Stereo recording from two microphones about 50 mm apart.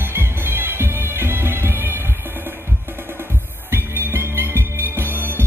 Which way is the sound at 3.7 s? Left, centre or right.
Right.